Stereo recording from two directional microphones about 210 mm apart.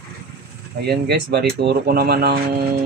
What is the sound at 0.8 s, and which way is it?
Speech, 50° right (ahead or behind).